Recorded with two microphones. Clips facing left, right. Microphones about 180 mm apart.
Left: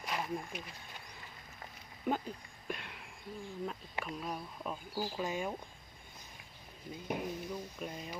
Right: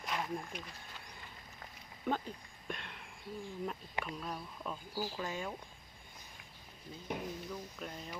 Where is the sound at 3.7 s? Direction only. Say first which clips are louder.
Even; 5° left (ahead or behind).